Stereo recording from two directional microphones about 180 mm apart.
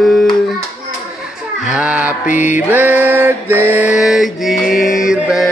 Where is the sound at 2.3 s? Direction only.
40° left (ahead or behind).